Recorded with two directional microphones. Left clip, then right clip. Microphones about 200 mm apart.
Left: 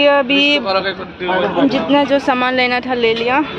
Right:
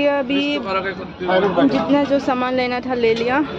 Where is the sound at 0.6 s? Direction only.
40° left (ahead or behind).